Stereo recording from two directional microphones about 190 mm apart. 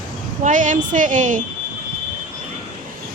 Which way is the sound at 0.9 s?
45° right (ahead or behind).